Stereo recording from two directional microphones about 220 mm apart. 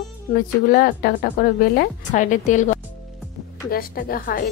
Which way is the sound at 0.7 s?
40° left (ahead or behind).